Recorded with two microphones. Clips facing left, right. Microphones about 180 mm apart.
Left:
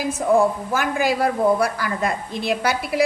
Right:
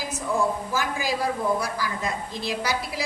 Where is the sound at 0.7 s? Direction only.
60° left (ahead or behind).